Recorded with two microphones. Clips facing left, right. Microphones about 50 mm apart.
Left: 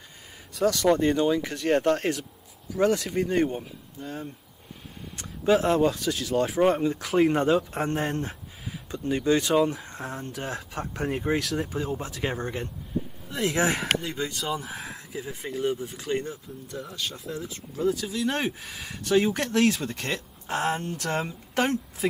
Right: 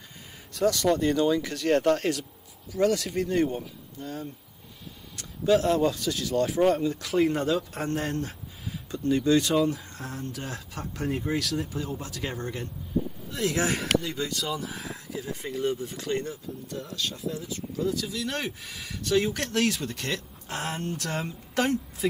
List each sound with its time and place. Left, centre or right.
0.6 s speech: centre
0.9 s speech: left
14.7 s speech: centre
15.0 s speech: centre
17.3 s speech: left